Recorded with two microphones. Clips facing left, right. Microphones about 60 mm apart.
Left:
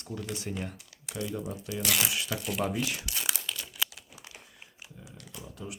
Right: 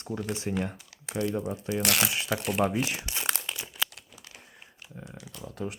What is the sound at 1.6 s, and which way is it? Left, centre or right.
Speech, right.